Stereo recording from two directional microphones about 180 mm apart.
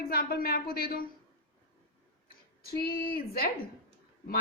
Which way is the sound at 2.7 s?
55° left (ahead or behind).